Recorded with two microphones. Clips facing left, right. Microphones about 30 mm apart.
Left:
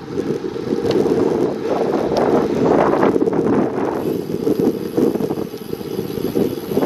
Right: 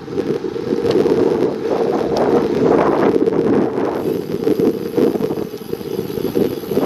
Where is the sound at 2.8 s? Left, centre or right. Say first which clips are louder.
Right 1 dB; right.